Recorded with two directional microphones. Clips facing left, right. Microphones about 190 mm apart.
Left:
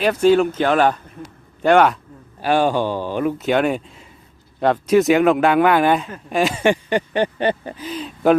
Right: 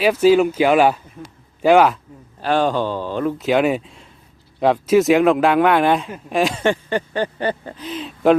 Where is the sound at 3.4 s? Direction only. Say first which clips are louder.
Right 4 dB; centre (ahead or behind).